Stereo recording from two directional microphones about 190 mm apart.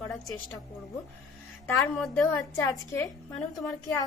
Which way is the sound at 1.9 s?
Centre (ahead or behind).